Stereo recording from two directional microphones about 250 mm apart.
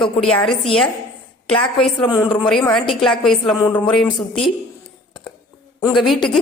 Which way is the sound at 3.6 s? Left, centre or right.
Centre.